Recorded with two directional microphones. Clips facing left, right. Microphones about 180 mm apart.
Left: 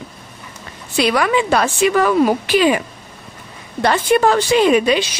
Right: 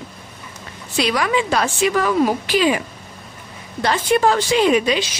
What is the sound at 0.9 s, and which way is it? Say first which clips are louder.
Speech: left 3 dB; 55° left (ahead or behind).